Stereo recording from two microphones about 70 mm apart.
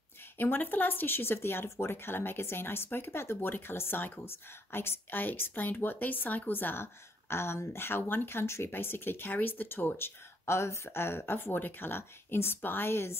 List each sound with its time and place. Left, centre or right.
0.4 s speech: left